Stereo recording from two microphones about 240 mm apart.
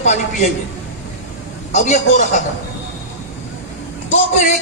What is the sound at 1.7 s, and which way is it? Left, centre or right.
Speech, left.